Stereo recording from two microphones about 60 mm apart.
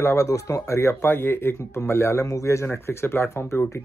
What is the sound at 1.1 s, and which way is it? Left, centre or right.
Speech, left.